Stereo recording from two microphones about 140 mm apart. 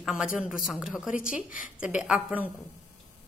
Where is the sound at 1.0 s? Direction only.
75° left (ahead or behind).